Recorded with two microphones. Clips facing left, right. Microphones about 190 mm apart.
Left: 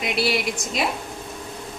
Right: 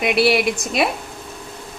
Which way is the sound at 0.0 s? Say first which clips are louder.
Right 7 dB; 65° right (ahead or behind).